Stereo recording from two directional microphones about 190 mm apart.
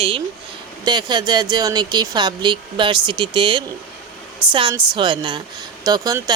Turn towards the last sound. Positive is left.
turn(degrees=-20)  # may be behind; listen again after turning